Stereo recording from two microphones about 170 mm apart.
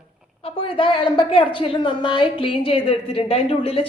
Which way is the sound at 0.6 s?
30° left (ahead or behind).